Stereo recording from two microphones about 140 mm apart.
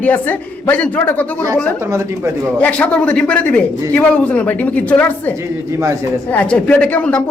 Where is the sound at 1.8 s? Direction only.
20° right (ahead or behind).